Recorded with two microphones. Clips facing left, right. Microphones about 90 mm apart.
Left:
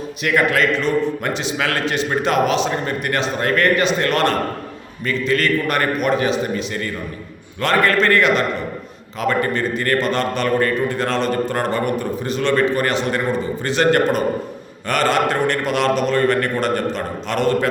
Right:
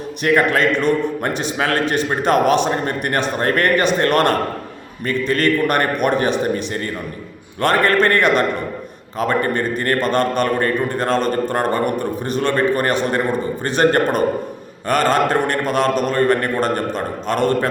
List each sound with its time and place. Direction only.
0.3 s a man's voice: 35° right (ahead or behind)
0.8 s a man's voice: 50° right (ahead or behind)
1.5 s a man's voice: 40° right (ahead or behind)
10.0 s a man's voice: 45° right (ahead or behind)